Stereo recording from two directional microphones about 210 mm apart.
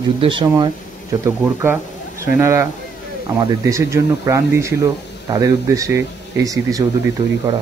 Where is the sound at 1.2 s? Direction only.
10° right (ahead or behind).